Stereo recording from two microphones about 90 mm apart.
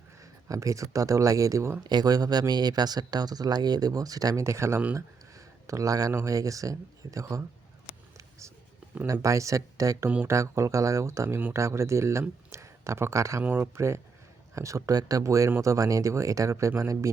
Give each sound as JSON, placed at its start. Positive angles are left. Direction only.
{"t": 0.2, "sound": "speech", "side_deg": -40}
{"t": 1.9, "sound": "speech", "side_deg": -50}
{"t": 9.2, "sound": "speech", "side_deg": -35}
{"t": 13.4, "sound": "speech", "side_deg": -20}